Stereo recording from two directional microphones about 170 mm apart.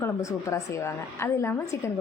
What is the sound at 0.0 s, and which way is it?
Speech, 15° left (ahead or behind).